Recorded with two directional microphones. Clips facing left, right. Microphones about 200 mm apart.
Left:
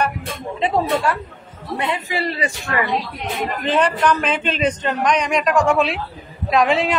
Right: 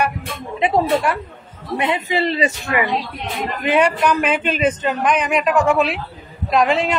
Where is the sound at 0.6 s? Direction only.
15° right (ahead or behind).